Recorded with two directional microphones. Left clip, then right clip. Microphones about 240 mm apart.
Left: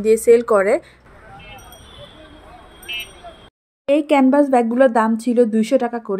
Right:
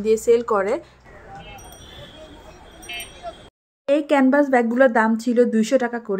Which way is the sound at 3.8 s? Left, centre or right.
Centre.